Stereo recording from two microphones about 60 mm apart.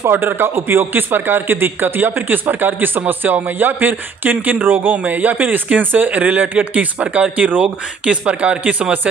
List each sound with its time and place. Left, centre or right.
0.1 s a man's voice: right